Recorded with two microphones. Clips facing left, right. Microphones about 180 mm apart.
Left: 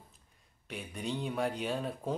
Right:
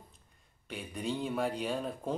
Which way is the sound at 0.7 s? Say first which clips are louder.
Right 1 dB; centre (ahead or behind).